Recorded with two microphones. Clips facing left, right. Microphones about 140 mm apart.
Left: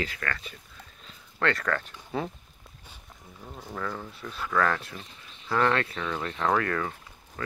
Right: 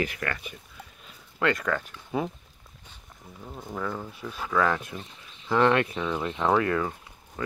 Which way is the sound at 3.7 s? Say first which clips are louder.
Right 2 dB; 10° right (ahead or behind).